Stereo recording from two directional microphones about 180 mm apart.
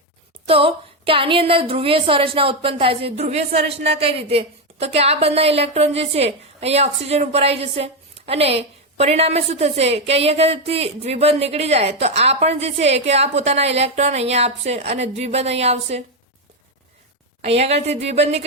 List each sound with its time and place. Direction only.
0.4 s a woman's voice: 30° right (ahead or behind)
17.4 s a woman's voice: 35° right (ahead or behind)